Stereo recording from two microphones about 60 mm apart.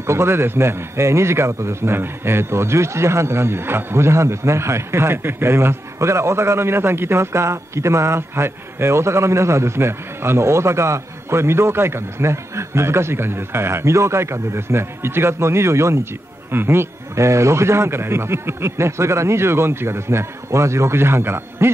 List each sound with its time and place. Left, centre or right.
0.0 s a man's voice: right